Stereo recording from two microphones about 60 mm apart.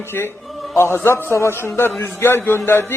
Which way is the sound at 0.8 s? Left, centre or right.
Left.